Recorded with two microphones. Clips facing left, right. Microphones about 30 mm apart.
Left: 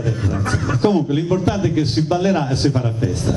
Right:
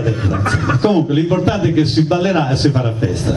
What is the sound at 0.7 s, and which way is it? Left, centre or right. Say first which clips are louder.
A man's voice: right 2 dB; right.